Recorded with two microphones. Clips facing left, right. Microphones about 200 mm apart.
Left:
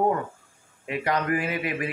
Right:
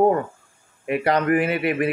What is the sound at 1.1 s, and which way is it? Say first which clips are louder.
Speech: right 6 dB; 65° right (ahead or behind).